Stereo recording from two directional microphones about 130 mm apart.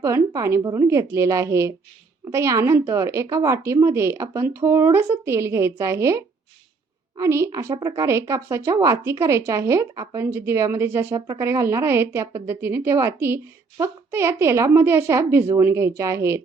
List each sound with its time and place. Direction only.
0.0 s a woman's voice: 25° right (ahead or behind)